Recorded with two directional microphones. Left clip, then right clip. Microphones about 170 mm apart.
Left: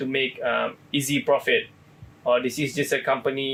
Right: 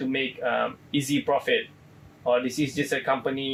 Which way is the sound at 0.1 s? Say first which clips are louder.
Left 3 dB; 75° left (ahead or behind).